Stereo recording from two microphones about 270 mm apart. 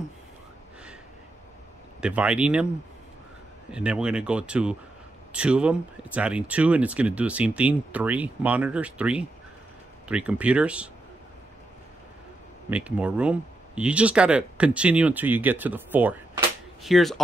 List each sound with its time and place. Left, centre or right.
2.0 s speech: centre
3.7 s speech: centre
12.6 s speech: centre